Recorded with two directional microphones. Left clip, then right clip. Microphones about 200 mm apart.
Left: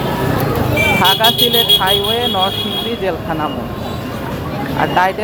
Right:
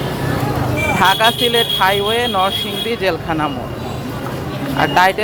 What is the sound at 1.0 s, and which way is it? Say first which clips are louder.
Speech: right 1 dB; 20° right (ahead or behind).